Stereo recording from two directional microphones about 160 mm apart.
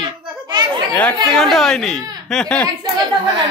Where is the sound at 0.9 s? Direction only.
5° left (ahead or behind).